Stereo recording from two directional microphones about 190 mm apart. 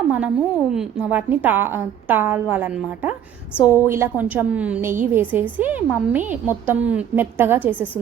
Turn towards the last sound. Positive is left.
turn(degrees=-10)  # may be behind; listen again after turning